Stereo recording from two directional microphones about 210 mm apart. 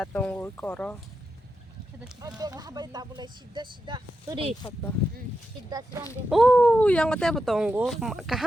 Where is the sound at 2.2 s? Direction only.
20° right (ahead or behind).